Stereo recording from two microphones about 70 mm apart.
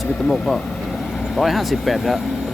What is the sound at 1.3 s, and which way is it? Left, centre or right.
Speech, centre.